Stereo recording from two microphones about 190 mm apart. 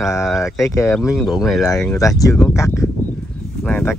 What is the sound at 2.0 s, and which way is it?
Speech, 15° left (ahead or behind).